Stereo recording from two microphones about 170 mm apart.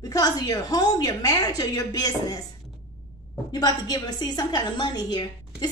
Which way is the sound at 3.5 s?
25° left (ahead or behind).